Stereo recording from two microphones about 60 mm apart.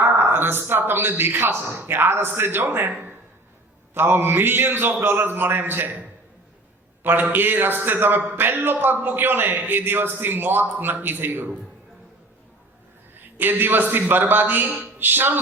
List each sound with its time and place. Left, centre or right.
0.0 s a man's voice: right
7.0 s a man's voice: right
13.3 s a man's voice: right